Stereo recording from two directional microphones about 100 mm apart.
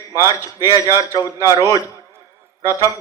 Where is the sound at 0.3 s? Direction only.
35° left (ahead or behind).